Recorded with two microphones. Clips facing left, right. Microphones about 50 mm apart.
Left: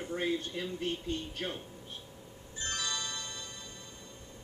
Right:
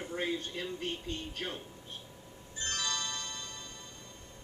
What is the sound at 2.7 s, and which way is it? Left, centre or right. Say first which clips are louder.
Music: right 1 dB; centre.